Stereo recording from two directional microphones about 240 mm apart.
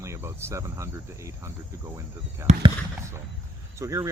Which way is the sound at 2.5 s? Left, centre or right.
Right.